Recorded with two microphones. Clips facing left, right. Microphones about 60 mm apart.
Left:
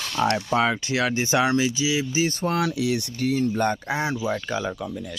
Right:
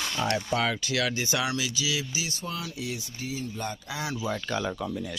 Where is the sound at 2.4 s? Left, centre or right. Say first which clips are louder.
Left 11 dB; left.